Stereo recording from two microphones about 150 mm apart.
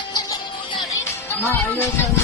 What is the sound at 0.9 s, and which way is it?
Music, 15° left (ahead or behind).